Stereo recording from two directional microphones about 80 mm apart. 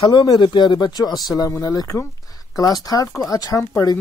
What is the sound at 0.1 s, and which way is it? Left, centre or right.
Speech, left.